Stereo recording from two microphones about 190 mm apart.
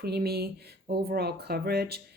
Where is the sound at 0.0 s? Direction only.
55° right (ahead or behind).